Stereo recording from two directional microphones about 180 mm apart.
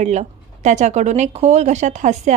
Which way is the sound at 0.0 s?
40° right (ahead or behind).